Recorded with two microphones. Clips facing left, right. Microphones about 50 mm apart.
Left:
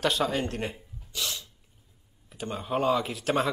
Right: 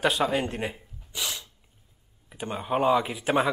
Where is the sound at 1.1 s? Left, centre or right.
Right.